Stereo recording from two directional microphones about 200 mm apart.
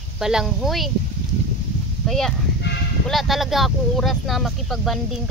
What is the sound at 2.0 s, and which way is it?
Speech, centre (ahead or behind).